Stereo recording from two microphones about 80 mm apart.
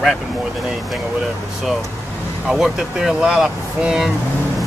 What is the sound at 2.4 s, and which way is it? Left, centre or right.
Speech, centre.